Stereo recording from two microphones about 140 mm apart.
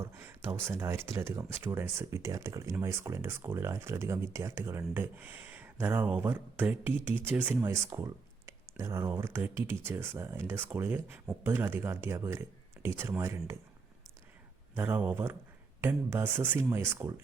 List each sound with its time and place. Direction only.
0.0 s speech: 20° right (ahead or behind)
14.8 s speech: 15° right (ahead or behind)